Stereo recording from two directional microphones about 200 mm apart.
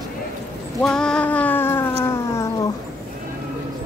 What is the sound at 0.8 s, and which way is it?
Cat, 5° left (ahead or behind).